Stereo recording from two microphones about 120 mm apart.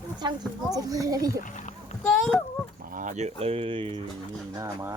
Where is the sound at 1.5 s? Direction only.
90° left.